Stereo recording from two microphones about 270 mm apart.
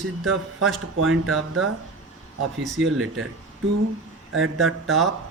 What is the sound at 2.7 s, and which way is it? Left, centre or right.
Speech, right.